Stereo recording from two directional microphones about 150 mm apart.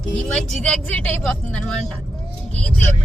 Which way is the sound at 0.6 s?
5° left (ahead or behind).